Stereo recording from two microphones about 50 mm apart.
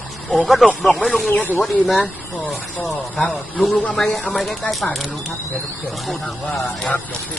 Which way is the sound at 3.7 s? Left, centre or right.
Left.